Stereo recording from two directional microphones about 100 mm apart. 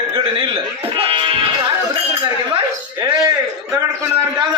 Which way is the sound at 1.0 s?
60° right (ahead or behind).